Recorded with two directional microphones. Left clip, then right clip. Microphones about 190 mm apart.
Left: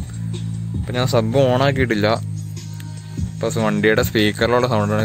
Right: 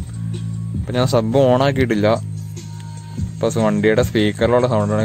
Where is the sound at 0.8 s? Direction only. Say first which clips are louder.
Right 1 dB; 20° right (ahead or behind).